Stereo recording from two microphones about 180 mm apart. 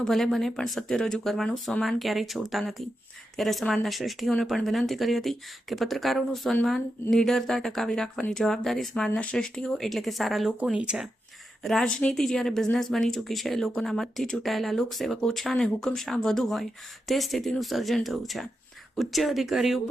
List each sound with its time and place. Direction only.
0.0 s speech: centre (ahead or behind)